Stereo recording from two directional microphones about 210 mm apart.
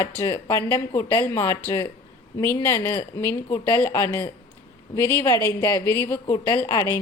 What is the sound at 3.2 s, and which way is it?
Speech, 10° left (ahead or behind).